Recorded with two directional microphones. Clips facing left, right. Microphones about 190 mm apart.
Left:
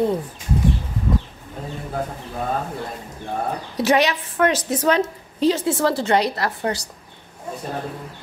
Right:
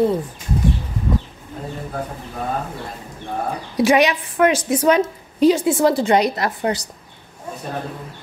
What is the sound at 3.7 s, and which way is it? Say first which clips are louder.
A woman's voice: right 3 dB; 10° right (ahead or behind).